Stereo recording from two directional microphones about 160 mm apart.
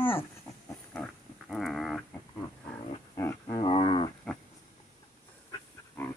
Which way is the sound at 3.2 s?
20° left (ahead or behind).